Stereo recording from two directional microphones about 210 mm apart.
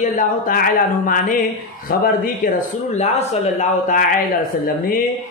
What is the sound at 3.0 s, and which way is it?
Speech, 30° left (ahead or behind).